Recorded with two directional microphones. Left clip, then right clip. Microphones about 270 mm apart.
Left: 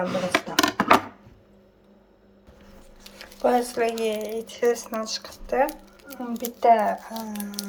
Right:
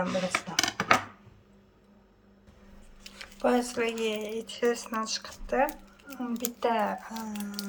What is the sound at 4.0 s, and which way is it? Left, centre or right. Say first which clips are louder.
Speech: left 5 dB; right.